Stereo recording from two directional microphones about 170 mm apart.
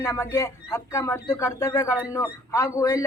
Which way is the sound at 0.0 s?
15° left (ahead or behind).